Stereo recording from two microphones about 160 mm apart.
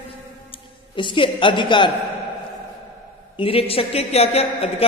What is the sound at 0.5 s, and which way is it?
A woman's voice, 30° left (ahead or behind).